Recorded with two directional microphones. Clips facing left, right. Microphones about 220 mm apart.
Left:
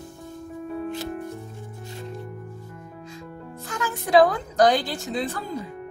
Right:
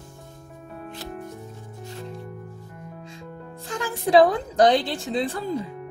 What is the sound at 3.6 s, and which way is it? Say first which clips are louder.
A woman's voice: right 3 dB; 30° right (ahead or behind).